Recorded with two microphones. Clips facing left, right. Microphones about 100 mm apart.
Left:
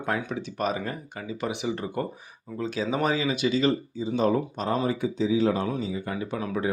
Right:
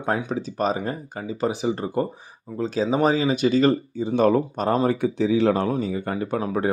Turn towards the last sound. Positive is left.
turn(degrees=-45)  # may be behind; listen again after turning